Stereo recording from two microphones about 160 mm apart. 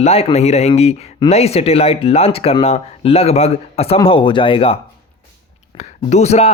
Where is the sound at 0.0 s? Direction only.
40° left (ahead or behind).